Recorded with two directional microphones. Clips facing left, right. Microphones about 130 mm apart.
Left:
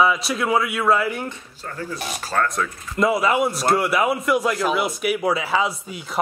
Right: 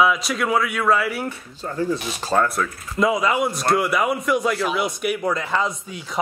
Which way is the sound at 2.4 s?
5° right (ahead or behind).